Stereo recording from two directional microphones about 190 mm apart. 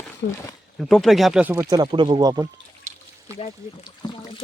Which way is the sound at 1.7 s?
25° right (ahead or behind).